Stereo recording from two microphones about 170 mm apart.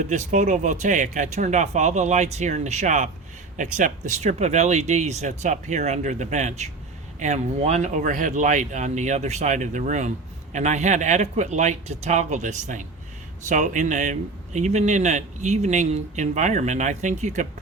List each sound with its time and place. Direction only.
0.0 s speech: 45° right (ahead or behind)